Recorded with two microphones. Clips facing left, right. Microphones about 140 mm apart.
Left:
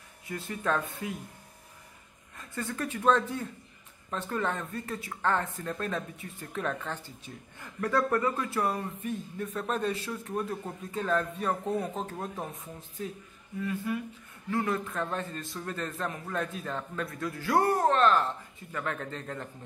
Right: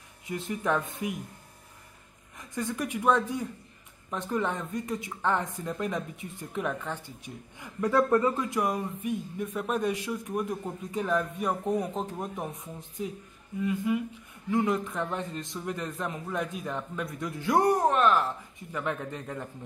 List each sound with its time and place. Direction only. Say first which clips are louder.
0.3 s speech: right 2 dB; 20° right (ahead or behind)
2.3 s speech: right 3 dB; 15° right (ahead or behind)